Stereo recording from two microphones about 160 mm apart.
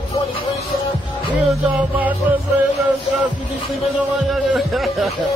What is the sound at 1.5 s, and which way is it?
Music, 10° right (ahead or behind).